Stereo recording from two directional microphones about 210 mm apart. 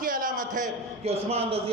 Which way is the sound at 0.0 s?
40° right (ahead or behind).